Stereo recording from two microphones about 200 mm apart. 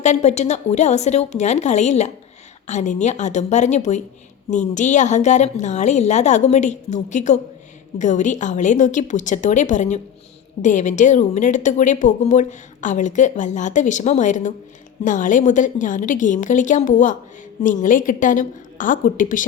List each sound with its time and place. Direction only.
0.0 s a woman's voice: 35° left (ahead or behind)